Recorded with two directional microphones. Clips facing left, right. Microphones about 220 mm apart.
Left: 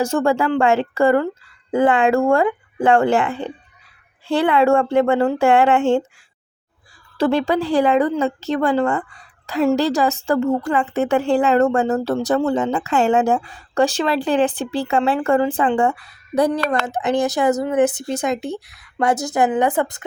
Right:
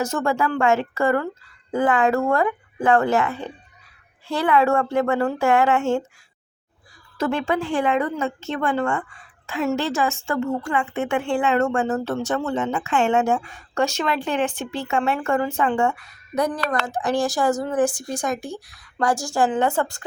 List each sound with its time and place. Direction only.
0.0 s a woman's voice: 30° left (ahead or behind)
7.2 s a woman's voice: 35° left (ahead or behind); by 20.1 s 20° left (ahead or behind)